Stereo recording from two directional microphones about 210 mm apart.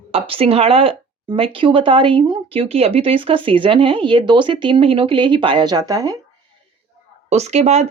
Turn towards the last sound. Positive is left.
turn(degrees=-30)  # may be behind; listen again after turning